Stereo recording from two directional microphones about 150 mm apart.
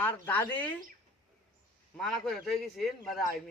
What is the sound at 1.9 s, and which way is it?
A man's voice, 5° left (ahead or behind).